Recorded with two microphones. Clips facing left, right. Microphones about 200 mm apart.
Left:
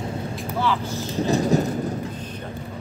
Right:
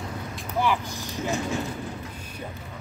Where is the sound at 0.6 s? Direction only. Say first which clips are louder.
Left 1 dB; 15° right (ahead or behind).